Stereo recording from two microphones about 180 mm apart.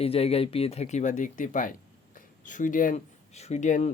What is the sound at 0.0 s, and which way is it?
Speech, 35° left (ahead or behind).